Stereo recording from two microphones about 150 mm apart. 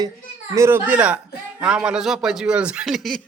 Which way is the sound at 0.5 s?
15° right (ahead or behind).